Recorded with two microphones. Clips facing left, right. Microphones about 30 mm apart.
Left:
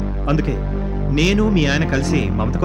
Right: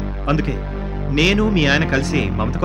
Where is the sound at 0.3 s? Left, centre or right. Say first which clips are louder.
Even; right.